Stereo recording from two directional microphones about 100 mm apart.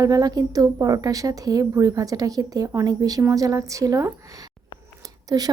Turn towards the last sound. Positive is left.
turn(degrees=-40)  # may be behind; listen again after turning